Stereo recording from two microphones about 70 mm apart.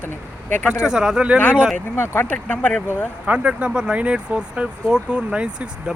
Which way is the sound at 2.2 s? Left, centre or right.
Left.